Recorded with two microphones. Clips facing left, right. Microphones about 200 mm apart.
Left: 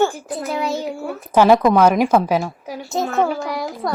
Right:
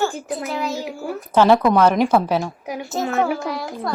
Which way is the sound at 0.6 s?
Centre (ahead or behind).